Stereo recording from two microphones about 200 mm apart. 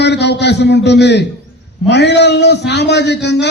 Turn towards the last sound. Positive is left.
turn(degrees=60)  # may be behind; listen again after turning